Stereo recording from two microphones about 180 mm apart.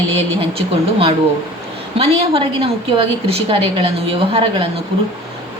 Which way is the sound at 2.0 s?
30° right (ahead or behind).